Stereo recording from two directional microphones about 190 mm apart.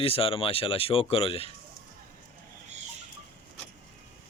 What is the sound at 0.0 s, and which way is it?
Speech, 30° left (ahead or behind).